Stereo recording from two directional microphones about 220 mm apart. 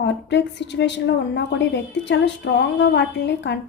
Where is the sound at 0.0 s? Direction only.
55° left (ahead or behind).